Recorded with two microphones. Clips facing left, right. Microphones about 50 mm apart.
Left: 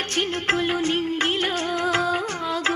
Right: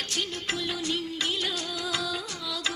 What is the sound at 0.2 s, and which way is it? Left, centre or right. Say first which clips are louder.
Music: left 10 dB; left.